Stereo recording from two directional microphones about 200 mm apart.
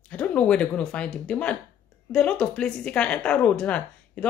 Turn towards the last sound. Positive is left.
turn(degrees=5)  # may be behind; listen again after turning